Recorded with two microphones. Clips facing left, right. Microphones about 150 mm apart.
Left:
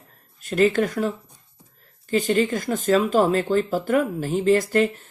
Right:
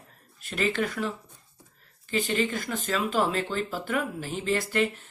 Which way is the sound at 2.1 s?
45° left (ahead or behind).